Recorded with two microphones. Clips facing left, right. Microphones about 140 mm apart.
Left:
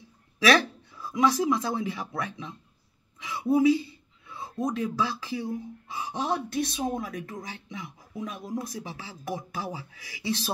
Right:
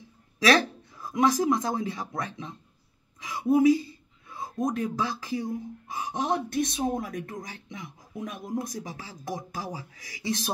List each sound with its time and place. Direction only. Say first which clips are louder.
0.5 s speech: even; 40° right (ahead or behind)
3.2 s a sound: right 1 dB; 45° right (ahead or behind)
4.6 s speech: even; 45° right (ahead or behind)